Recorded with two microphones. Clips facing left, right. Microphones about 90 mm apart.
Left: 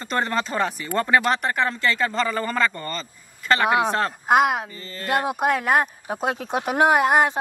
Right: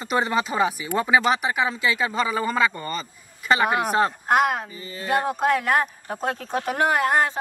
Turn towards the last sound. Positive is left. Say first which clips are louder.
# left 3 dB
turn(degrees=15)  # may be behind; listen again after turning